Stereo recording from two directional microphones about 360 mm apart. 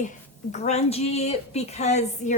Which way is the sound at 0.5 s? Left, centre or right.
Centre.